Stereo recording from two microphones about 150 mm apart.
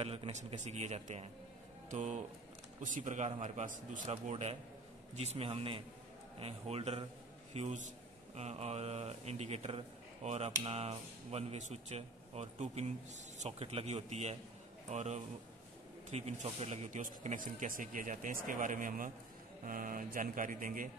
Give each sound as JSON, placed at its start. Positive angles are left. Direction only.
{"t": 0.0, "sound": "a man's voice", "side_deg": -40}